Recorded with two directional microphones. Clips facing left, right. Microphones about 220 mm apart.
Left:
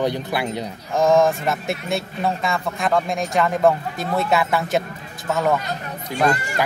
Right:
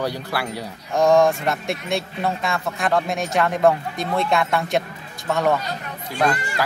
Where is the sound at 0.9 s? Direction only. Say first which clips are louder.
Even; centre (ahead or behind).